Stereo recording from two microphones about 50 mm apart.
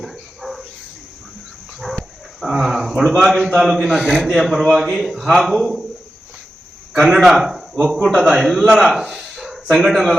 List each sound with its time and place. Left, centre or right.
0.0 s dog: centre
2.4 s a sound: centre
3.2 s a man's voice: centre
3.8 s a man's voice: centre
4.2 s a man's voice: centre
7.0 s a man's voice: centre